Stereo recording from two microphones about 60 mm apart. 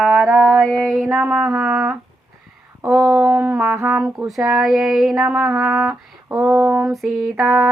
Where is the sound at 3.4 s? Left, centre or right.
Right.